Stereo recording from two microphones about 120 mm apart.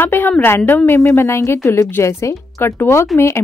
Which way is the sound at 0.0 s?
15° left (ahead or behind).